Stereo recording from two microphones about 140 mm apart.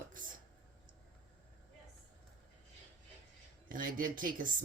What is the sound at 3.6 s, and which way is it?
Speech, 80° right.